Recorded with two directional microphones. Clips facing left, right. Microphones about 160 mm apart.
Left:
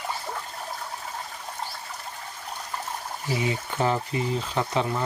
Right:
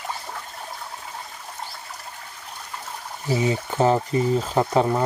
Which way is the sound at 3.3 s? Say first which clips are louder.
Right 5 dB; 35° right (ahead or behind).